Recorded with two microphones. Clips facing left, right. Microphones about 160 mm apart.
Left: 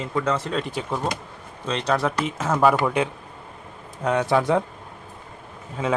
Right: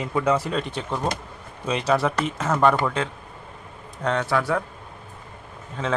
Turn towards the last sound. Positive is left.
turn(degrees=5)  # may be behind; listen again after turning